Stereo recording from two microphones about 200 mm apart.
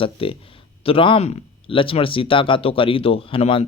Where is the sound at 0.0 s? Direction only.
25° left (ahead or behind).